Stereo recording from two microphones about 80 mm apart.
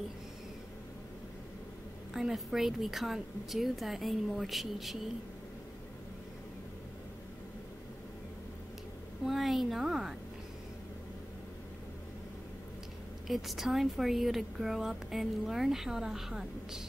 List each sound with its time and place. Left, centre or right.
2.1 s speech: centre
9.2 s speech: centre
13.3 s speech: centre